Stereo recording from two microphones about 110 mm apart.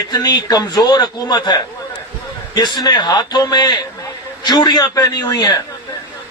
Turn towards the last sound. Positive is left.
turn(degrees=35)  # may be behind; listen again after turning